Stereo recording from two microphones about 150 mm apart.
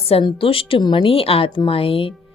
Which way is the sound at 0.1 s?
35° left (ahead or behind).